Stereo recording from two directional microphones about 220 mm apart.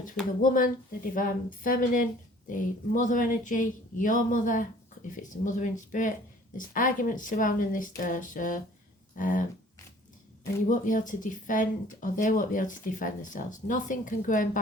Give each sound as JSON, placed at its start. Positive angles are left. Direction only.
{"t": 0.4, "sound": "speech", "side_deg": 40}
{"t": 10.7, "sound": "speech", "side_deg": 35}